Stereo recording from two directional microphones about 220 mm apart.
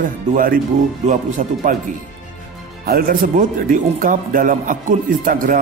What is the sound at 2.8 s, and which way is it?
Speech, 40° right (ahead or behind).